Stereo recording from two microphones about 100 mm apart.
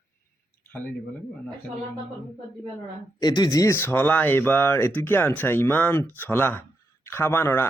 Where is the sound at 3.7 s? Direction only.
20° left (ahead or behind).